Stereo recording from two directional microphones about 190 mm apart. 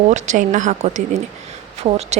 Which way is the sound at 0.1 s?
40° right (ahead or behind).